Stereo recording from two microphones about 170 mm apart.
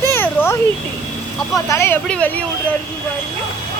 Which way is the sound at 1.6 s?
15° left (ahead or behind).